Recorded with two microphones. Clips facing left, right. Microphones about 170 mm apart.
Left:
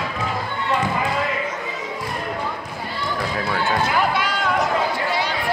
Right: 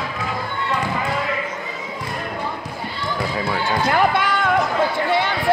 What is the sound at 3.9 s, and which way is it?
Run, 50° right (ahead or behind).